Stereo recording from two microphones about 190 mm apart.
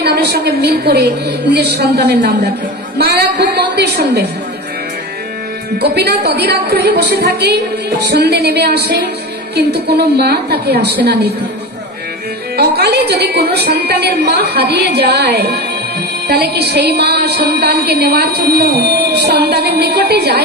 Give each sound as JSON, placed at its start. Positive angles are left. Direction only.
{"t": 0.0, "sound": "music", "side_deg": -60}
{"t": 5.8, "sound": "music", "side_deg": -55}
{"t": 12.5, "sound": "music", "side_deg": -60}